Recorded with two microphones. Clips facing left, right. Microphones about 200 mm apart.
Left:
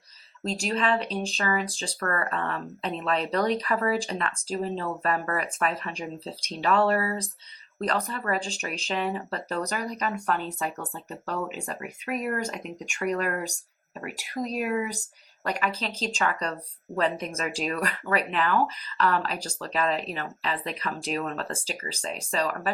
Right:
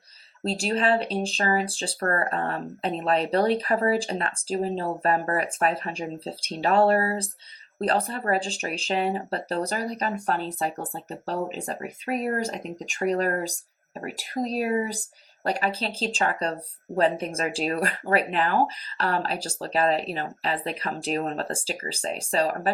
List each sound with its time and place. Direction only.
0.4 s speech: 35° right (ahead or behind)